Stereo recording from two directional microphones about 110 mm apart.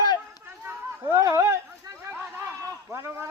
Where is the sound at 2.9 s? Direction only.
25° right (ahead or behind).